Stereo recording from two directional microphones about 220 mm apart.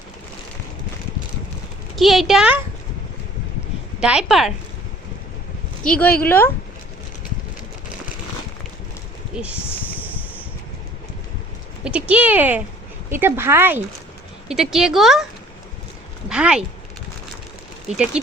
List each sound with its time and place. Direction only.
2.0 s speech: centre (ahead or behind)
4.0 s speech: 5° right (ahead or behind)
5.8 s speech: 5° left (ahead or behind)
9.3 s speech: 5° right (ahead or behind)
11.8 s speech: 5° right (ahead or behind)
16.3 s speech: 5° right (ahead or behind)
17.9 s speech: 5° right (ahead or behind)